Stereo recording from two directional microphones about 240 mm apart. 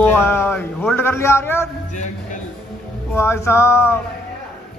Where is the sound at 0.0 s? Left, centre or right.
Centre.